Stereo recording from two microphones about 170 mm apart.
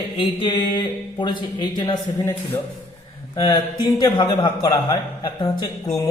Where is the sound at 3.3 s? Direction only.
25° left (ahead or behind).